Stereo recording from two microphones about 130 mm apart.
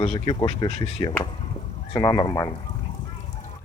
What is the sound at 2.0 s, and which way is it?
Speech, 30° left (ahead or behind).